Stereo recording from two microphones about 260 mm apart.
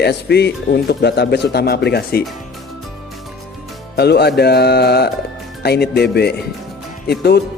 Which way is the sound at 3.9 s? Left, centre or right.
Left.